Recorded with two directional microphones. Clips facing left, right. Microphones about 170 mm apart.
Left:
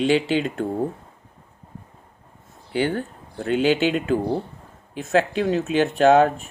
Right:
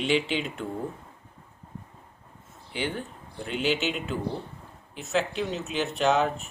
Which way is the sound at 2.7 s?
45° left (ahead or behind).